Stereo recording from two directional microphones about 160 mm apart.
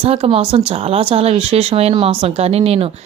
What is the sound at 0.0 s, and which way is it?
A woman's voice, 35° right (ahead or behind).